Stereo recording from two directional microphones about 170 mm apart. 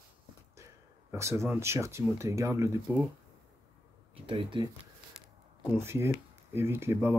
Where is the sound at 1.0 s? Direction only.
15° right (ahead or behind).